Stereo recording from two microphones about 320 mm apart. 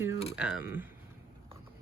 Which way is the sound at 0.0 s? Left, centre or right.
Centre.